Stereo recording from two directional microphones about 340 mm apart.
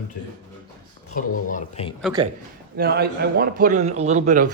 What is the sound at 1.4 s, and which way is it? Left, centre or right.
Speech, left.